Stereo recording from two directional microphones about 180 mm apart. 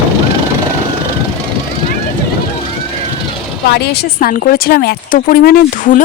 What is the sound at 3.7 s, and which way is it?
A woman's voice, 60° left (ahead or behind).